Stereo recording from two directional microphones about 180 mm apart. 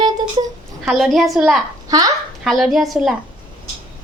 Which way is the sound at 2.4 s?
Centre (ahead or behind).